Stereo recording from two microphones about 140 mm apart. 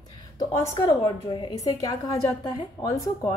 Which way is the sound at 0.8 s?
35° left (ahead or behind).